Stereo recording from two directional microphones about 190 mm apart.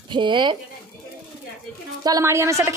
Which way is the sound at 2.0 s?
15° right (ahead or behind).